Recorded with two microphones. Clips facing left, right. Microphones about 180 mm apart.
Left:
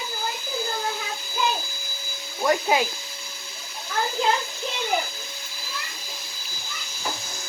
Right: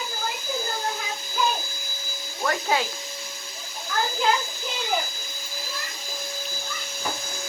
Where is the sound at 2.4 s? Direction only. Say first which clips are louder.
Left 3 dB; 15° left (ahead or behind).